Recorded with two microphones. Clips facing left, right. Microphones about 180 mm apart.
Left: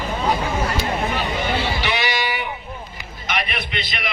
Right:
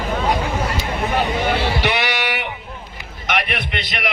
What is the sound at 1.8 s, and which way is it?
Music, 65° right (ahead or behind).